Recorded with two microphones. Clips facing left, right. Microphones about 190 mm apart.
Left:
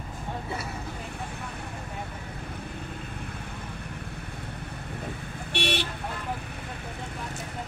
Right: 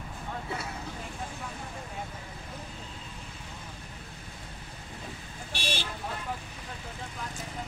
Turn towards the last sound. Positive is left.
turn(degrees=65)  # may be behind; listen again after turning